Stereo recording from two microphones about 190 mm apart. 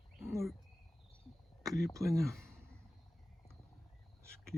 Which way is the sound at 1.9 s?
15° right (ahead or behind).